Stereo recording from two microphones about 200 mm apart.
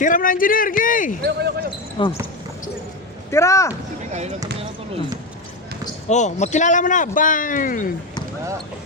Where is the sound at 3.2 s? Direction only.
15° left (ahead or behind).